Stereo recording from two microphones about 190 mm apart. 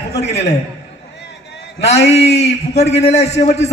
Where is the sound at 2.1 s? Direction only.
35° left (ahead or behind).